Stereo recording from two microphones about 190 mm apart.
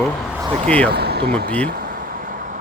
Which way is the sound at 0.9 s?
55° right (ahead or behind).